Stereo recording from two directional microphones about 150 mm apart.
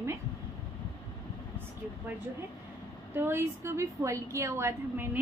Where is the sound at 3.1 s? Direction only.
15° right (ahead or behind).